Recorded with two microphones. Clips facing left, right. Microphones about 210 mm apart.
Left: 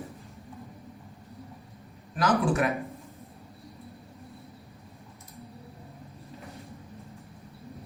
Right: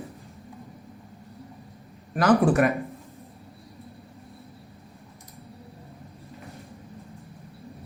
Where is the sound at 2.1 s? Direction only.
60° right (ahead or behind).